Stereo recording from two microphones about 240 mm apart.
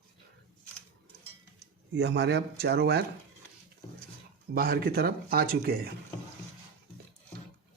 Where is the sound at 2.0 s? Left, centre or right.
Right.